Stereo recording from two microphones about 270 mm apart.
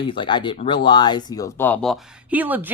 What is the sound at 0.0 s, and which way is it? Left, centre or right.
A woman's voice, centre.